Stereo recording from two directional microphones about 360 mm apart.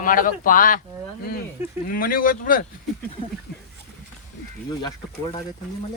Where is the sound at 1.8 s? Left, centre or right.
Left.